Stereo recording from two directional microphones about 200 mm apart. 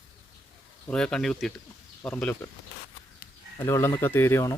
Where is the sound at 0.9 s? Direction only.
5° left (ahead or behind).